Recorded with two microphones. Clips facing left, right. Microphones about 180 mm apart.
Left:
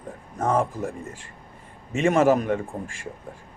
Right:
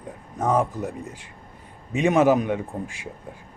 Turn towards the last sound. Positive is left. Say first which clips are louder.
# right 1 dB
turn(degrees=-5)  # may be behind; listen again after turning